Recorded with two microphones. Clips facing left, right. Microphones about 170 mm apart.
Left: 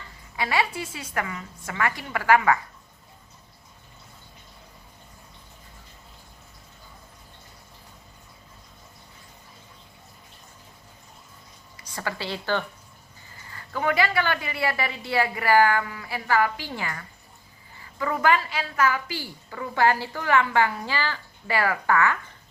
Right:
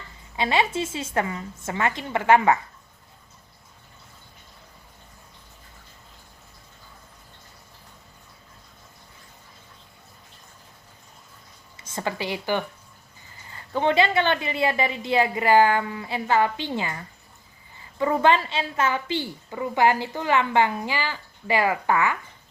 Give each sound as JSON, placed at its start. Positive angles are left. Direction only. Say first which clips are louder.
{"t": 0.3, "sound": "a woman's voice", "louder": "right 3 dB", "side_deg": -25}
{"t": 11.8, "sound": "a woman's voice", "louder": "right 3 dB", "side_deg": -25}